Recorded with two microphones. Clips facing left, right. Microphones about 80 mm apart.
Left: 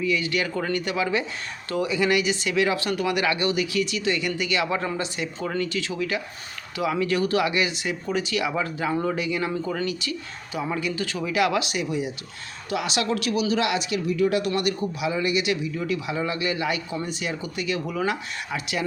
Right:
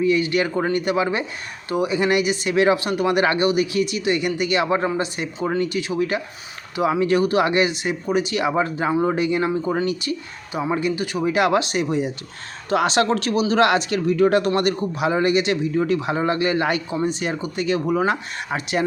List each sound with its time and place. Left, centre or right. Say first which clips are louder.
0.0 s speech: right 6 dB; right
11.2 s speech: right 5 dB; right
16.9 s speech: right 6 dB; right